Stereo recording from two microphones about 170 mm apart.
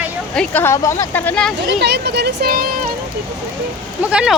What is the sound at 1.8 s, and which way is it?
Speech, 75° right (ahead or behind).